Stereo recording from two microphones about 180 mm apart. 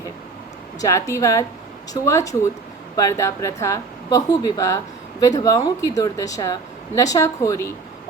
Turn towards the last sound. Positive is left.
turn(degrees=15)  # may be behind; listen again after turning